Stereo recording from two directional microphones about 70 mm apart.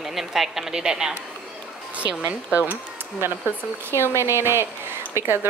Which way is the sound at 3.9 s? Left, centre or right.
Left.